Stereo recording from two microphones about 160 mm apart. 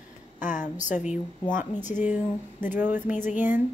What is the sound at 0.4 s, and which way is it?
A woman's voice, 50° left (ahead or behind).